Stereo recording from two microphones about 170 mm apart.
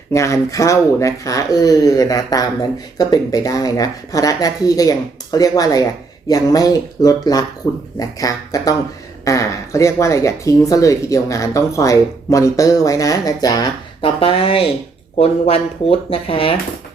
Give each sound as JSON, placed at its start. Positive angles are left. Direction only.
{"t": 0.1, "sound": "speech", "side_deg": 20}